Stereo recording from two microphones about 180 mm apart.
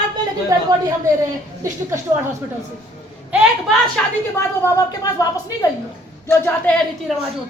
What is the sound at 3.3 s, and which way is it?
Speech, 5° right (ahead or behind).